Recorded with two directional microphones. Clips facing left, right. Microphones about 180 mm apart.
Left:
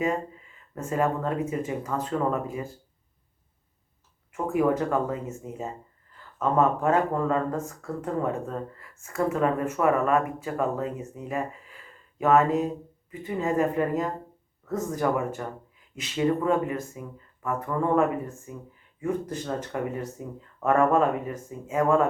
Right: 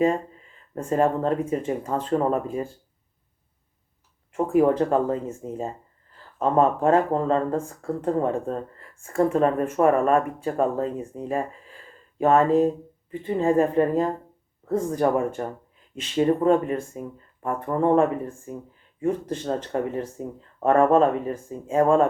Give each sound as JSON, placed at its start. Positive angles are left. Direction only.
{"t": 0.8, "sound": "speech", "side_deg": -30}
{"t": 4.3, "sound": "speech", "side_deg": -30}